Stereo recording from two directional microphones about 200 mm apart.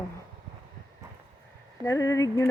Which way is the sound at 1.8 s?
15° left (ahead or behind).